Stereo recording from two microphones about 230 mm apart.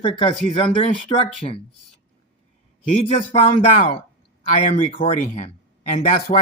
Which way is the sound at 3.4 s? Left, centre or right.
Left.